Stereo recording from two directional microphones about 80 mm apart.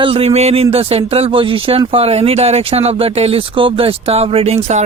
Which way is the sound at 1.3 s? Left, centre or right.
Right.